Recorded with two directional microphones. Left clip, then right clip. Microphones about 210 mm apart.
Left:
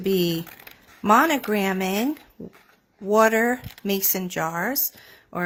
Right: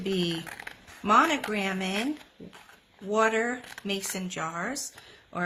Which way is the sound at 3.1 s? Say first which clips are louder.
Left 7 dB; 50° left (ahead or behind).